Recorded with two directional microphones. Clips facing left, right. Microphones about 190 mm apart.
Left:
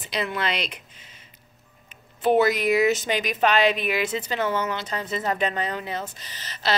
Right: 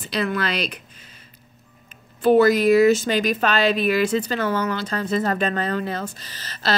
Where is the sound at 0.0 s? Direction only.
20° left (ahead or behind).